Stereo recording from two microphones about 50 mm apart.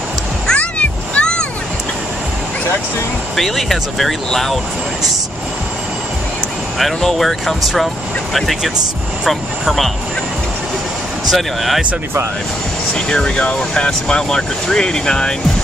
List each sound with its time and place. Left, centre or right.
0.5 s a sound: left
3.3 s speech: centre
6.8 s speech: centre
11.2 s speech: centre
12.9 s speech: centre